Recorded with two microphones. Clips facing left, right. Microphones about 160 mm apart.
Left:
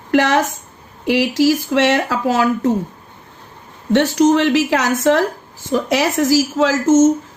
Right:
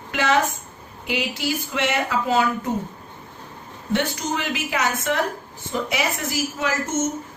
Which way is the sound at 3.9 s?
90° left.